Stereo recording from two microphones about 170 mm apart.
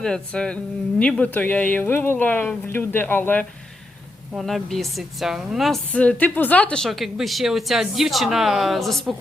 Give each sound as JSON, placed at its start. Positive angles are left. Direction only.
{"t": 0.0, "sound": "a woman's voice", "side_deg": 5}